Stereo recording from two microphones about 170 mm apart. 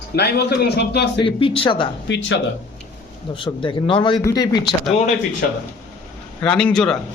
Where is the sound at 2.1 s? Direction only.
90° left.